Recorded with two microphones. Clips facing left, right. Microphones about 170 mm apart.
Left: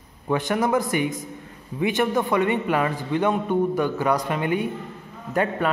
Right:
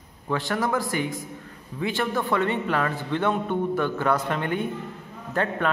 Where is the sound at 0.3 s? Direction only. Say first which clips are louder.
Left 4 dB; 20° left (ahead or behind).